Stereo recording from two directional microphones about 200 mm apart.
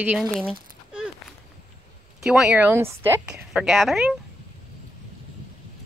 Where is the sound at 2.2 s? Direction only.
5° right (ahead or behind).